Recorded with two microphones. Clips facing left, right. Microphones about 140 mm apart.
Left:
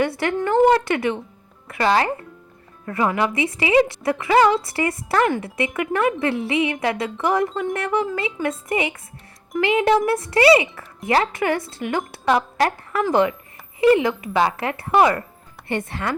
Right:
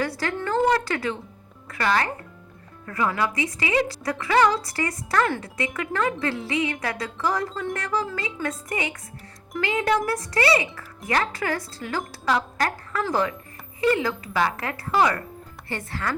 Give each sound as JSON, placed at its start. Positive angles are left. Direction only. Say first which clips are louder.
{"t": 0.0, "sound": "speech", "louder": "left 6 dB", "side_deg": 25}